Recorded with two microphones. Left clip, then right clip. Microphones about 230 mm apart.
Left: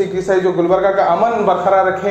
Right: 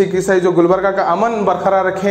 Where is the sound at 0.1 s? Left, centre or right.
Right.